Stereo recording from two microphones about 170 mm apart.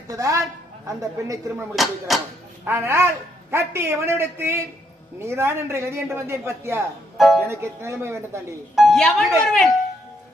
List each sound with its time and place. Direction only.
0.1 s a woman's voice: 20° right (ahead or behind)
1.7 s speech: centre (ahead or behind)
2.6 s a man's voice: 15° right (ahead or behind)
7.2 s speech: centre (ahead or behind)
7.4 s a man's voice: 15° right (ahead or behind)
8.7 s speech: centre (ahead or behind)